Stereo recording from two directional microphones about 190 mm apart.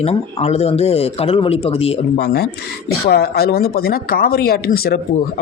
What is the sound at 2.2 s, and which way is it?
Speech, 55° left (ahead or behind).